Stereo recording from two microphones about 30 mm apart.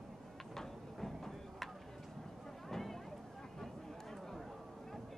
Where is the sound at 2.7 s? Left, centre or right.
Centre.